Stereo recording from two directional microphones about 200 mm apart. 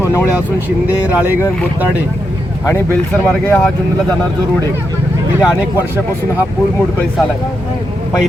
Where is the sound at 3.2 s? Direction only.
10° left (ahead or behind).